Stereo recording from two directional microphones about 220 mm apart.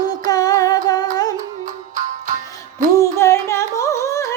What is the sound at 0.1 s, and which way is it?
Music, 15° left (ahead or behind).